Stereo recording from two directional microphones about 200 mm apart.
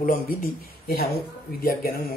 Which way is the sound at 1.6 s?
50° left (ahead or behind).